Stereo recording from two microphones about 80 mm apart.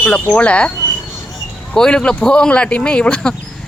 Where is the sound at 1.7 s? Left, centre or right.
Centre.